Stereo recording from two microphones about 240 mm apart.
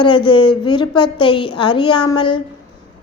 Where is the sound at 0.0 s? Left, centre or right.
Centre.